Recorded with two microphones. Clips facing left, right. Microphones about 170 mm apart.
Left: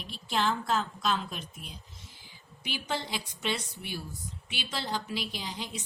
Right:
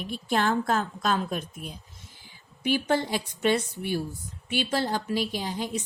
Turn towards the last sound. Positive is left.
turn(degrees=-45)  # may be behind; listen again after turning